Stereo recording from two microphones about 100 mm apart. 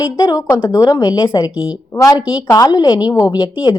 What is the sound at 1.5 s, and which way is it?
Speech, 10° right (ahead or behind).